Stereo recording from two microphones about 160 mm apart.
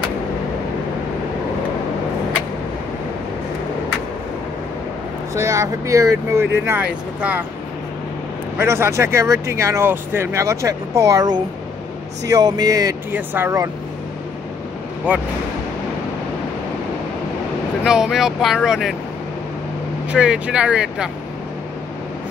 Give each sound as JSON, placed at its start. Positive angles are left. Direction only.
{"t": 5.3, "sound": "speech", "side_deg": -15}
{"t": 8.5, "sound": "speech", "side_deg": -15}
{"t": 15.1, "sound": "speech", "side_deg": -10}
{"t": 17.8, "sound": "speech", "side_deg": -5}
{"t": 20.1, "sound": "speech", "side_deg": -5}